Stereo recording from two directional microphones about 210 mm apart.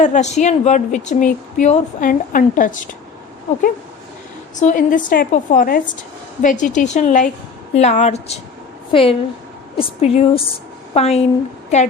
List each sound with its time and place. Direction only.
0.0 s a woman's voice: 35° left (ahead or behind)
4.6 s a woman's voice: 40° left (ahead or behind)